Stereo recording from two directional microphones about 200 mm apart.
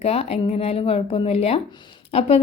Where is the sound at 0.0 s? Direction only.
30° left (ahead or behind).